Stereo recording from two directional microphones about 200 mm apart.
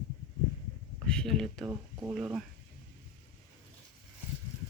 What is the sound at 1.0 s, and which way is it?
Speech, 5° left (ahead or behind).